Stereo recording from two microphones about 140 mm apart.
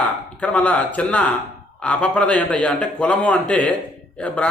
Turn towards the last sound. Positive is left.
turn(degrees=5)  # may be behind; listen again after turning